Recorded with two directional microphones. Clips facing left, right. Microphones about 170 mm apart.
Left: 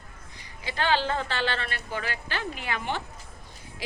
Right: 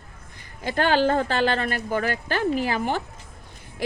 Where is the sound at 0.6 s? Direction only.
50° right (ahead or behind).